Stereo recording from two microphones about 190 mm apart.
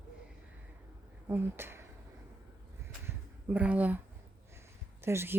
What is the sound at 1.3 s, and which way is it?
Speech, 10° right (ahead or behind).